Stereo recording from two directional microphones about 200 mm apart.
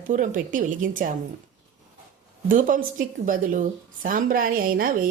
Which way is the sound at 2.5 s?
40° right (ahead or behind).